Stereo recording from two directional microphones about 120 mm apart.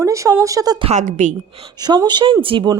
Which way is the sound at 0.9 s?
85° right.